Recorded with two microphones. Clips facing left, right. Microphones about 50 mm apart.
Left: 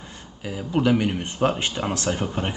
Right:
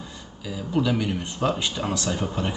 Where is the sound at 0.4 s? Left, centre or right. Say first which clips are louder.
Left 3 dB; left.